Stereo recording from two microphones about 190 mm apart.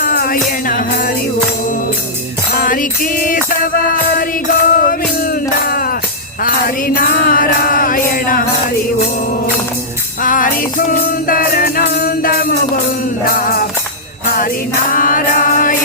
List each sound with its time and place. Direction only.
0.0 s music: 50° left (ahead or behind)
2.6 s mantra: 45° left (ahead or behind)
4.8 s music: 50° left (ahead or behind)
6.4 s mantra: 50° left (ahead or behind)
10.2 s mantra: 45° left (ahead or behind)